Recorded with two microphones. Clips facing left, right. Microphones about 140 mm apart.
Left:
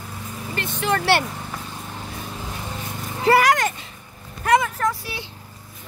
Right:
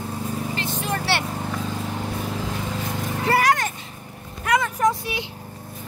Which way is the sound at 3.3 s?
90° left.